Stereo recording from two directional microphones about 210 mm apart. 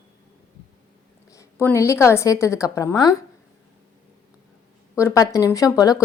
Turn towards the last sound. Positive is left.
turn(degrees=15)  # may be behind; listen again after turning